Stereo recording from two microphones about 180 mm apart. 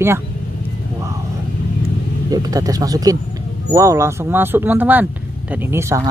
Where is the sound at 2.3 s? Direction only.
20° right (ahead or behind).